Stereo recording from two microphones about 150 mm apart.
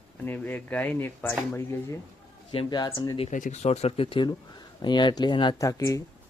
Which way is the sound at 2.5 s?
35° left (ahead or behind).